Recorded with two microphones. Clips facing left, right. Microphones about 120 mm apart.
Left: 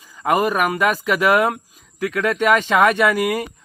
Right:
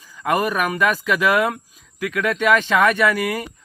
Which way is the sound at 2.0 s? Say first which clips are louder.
Left 2 dB; 30° left (ahead or behind).